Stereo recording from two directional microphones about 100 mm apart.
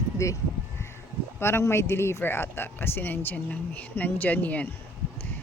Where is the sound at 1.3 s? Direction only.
25° left (ahead or behind).